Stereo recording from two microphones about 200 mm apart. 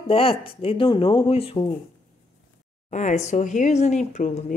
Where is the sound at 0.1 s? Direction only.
30° left (ahead or behind).